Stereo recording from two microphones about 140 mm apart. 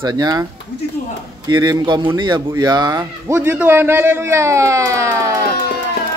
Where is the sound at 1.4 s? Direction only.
30° right (ahead or behind).